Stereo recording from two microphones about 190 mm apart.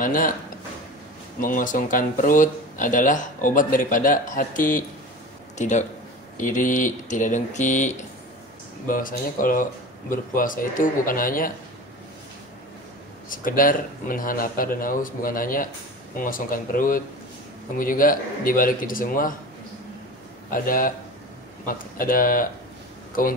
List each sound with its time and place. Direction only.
0.0 s speech: 45° left (ahead or behind)
1.4 s speech: 45° left (ahead or behind)
13.3 s speech: 45° left (ahead or behind)
20.5 s speech: 45° left (ahead or behind)